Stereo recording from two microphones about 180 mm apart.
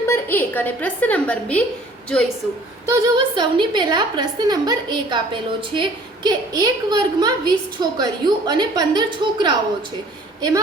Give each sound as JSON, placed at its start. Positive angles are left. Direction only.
{"t": 0.1, "sound": "a woman's voice", "side_deg": 10}
{"t": 2.8, "sound": "a woman's voice", "side_deg": -20}